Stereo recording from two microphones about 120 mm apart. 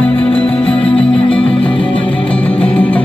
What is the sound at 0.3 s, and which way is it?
Music, 50° left (ahead or behind).